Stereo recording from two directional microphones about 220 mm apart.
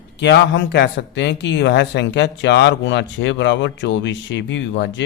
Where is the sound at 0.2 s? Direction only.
55° left (ahead or behind).